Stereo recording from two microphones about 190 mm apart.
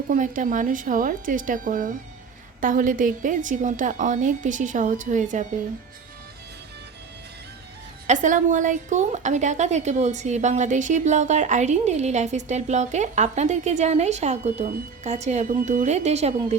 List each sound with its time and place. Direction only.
0.1 s a woman's voice: 45° right (ahead or behind)
8.0 s a woman's voice: 40° right (ahead or behind)